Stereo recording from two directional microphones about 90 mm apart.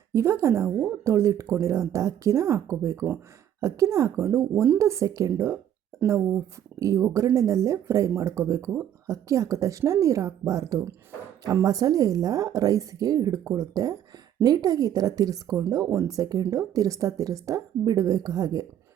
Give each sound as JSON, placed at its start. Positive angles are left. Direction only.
{"t": 0.1, "sound": "a woman's voice", "side_deg": -30}
{"t": 6.7, "sound": "a woman's voice", "side_deg": -35}